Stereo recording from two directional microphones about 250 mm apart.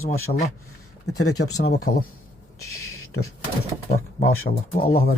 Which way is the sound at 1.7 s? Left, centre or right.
Left.